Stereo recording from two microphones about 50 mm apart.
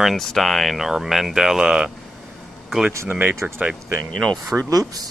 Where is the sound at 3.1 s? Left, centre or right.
Right.